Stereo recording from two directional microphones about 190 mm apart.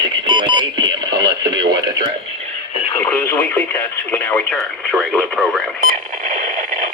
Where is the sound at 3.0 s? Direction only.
10° left (ahead or behind).